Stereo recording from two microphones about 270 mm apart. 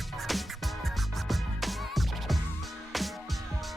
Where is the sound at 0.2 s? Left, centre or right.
Centre.